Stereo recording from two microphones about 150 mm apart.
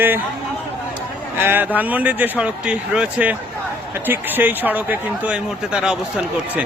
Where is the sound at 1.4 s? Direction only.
15° right (ahead or behind).